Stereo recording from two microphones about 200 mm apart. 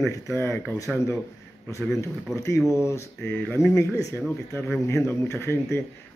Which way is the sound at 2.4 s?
15° left (ahead or behind).